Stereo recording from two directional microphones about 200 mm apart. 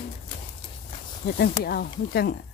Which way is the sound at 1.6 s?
50° left (ahead or behind).